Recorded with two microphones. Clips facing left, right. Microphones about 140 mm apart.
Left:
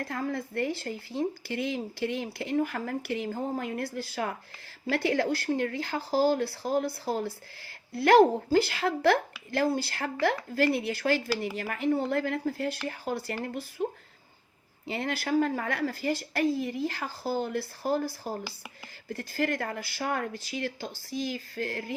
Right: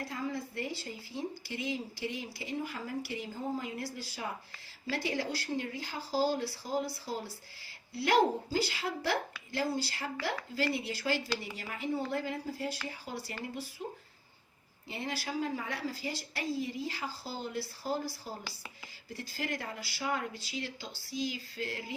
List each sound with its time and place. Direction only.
0.0 s speech: 55° left (ahead or behind)
14.8 s speech: 65° left (ahead or behind)